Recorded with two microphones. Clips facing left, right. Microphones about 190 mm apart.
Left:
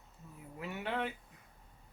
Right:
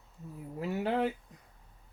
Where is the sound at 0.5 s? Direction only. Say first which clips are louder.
Right 7 dB; 35° right (ahead or behind).